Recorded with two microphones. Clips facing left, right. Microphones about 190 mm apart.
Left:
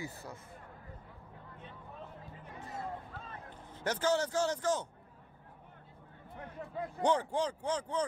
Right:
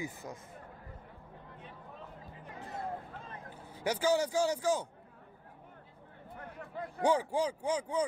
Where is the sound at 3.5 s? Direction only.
10° right (ahead or behind).